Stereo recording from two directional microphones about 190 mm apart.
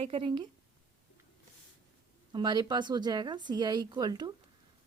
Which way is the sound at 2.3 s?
20° right (ahead or behind).